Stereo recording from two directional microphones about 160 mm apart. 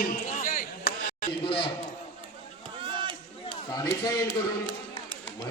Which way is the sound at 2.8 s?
30° right (ahead or behind).